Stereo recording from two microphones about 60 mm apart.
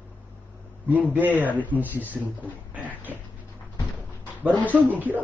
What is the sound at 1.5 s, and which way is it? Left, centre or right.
A man's voice, left.